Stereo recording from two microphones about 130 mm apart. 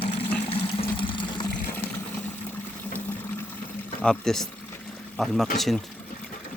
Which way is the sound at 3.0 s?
15° left (ahead or behind).